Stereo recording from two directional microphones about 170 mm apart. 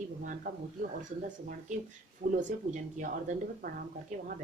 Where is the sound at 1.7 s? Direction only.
45° right (ahead or behind).